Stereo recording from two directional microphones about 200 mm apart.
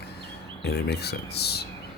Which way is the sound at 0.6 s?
55° left (ahead or behind).